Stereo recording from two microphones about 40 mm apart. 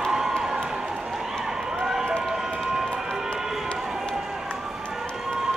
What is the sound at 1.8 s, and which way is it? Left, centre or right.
Run, centre.